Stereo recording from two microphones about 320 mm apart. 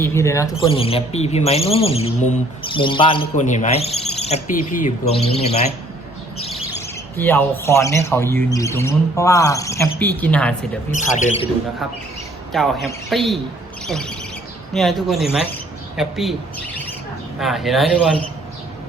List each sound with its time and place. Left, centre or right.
0.0 s speech: centre
7.2 s speech: centre
10.9 s speech: left
12.5 s a man's voice: centre
17.4 s a man's voice: centre